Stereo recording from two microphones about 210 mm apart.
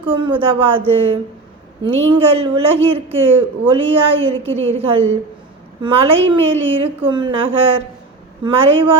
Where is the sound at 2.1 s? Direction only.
25° right (ahead or behind).